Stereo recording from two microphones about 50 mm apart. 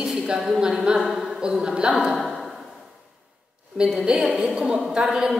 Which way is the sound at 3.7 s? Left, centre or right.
Centre.